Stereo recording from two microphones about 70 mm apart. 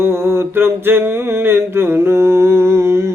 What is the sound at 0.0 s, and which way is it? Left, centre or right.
Mantra, right.